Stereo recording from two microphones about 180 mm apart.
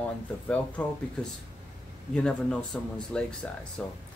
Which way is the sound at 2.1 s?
5° left (ahead or behind).